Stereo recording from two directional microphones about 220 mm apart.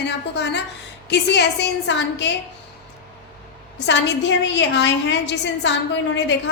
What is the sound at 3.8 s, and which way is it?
A woman's voice, 55° left (ahead or behind).